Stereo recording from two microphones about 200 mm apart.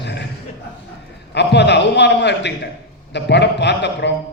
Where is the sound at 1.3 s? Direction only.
60° left (ahead or behind).